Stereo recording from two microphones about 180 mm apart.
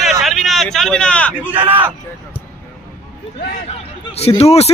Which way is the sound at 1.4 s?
10° right (ahead or behind).